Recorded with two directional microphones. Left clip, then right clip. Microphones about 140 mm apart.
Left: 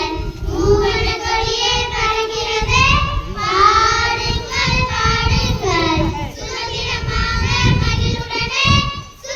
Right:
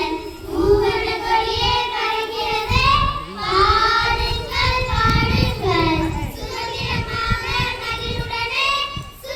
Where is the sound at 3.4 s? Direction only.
5° left (ahead or behind).